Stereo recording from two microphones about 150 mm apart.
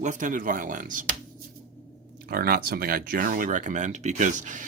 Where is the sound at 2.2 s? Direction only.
90° right; by 4.6 s 55° right (ahead or behind).